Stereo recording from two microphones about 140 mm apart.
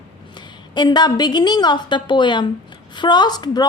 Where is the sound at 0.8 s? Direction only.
30° left (ahead or behind).